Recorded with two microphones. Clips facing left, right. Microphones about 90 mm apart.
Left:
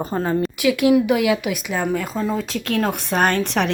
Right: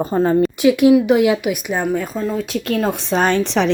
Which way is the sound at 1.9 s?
90° left.